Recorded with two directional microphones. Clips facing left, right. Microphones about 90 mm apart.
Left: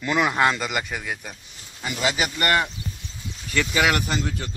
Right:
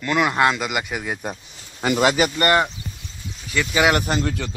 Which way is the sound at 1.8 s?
60° right (ahead or behind).